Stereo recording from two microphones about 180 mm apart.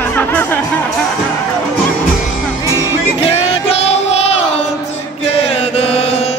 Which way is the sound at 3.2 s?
30° left (ahead or behind).